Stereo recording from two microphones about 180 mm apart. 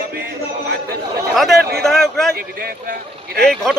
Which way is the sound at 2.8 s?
60° right (ahead or behind).